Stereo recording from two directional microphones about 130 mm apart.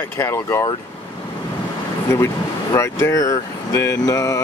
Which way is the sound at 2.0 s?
20° left (ahead or behind).